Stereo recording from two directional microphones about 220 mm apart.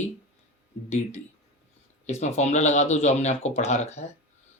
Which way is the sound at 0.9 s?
30° left (ahead or behind).